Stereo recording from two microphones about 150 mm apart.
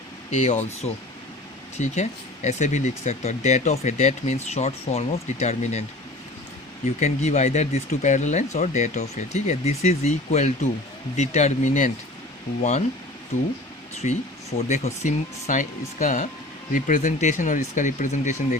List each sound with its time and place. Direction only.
0.3 s speech: 50° left (ahead or behind)
6.8 s speech: 45° left (ahead or behind)
13.3 s speech: 55° left (ahead or behind)